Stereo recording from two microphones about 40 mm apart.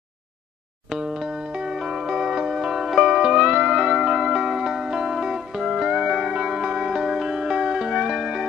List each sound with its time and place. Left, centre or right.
0.9 s music: centre
3.2 s music: centre
3.4 s music: centre